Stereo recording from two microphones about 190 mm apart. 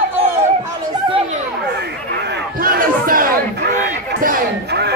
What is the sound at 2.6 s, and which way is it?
Crowd, 50° right (ahead or behind).